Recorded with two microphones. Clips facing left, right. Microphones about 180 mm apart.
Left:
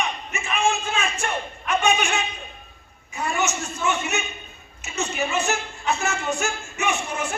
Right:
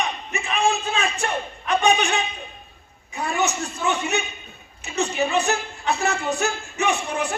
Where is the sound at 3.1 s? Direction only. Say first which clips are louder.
Right 1 dB; 35° right (ahead or behind).